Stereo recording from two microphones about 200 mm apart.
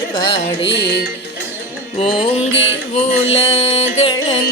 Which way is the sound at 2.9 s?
30° left (ahead or behind).